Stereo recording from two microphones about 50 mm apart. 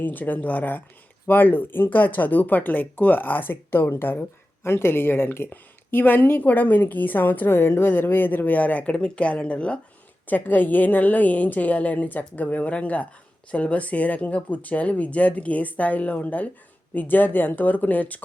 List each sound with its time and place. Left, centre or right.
0.0 s speech: left
10.2 s speech: left